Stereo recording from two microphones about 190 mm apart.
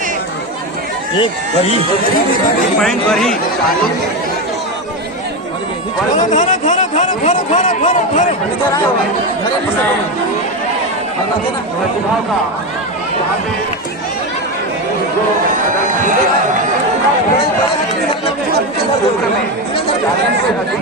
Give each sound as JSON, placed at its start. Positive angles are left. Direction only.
{"t": 2.8, "sound": "speech", "side_deg": 0}
{"t": 6.1, "sound": "a man's voice", "side_deg": 40}